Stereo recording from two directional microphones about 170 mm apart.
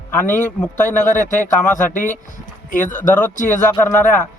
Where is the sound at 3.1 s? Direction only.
10° left (ahead or behind).